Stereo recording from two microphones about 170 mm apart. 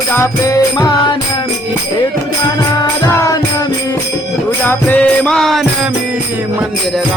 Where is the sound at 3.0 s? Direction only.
20° left (ahead or behind).